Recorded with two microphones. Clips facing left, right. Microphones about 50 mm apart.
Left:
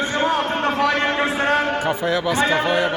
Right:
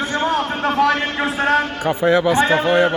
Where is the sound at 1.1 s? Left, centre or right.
Centre.